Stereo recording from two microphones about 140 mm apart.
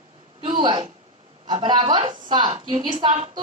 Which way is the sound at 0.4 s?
35° right (ahead or behind).